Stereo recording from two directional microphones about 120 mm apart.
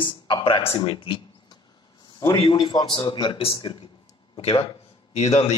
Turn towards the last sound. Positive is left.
turn(degrees=65)  # may be behind; listen again after turning